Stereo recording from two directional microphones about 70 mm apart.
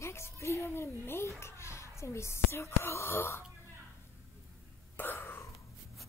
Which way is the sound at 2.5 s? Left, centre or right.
Left.